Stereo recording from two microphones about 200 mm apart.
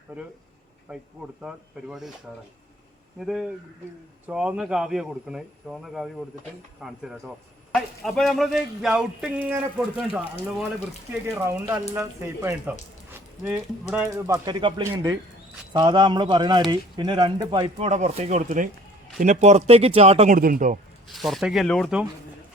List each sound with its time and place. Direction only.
0.9 s speech: 5° right (ahead or behind)
3.2 s speech: centre (ahead or behind); by 20.7 s 40° right (ahead or behind)
21.1 s speech: centre (ahead or behind)